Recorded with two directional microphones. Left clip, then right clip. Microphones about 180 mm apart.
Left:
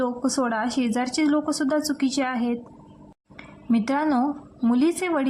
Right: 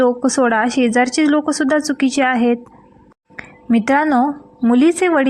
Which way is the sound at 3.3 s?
30° right (ahead or behind).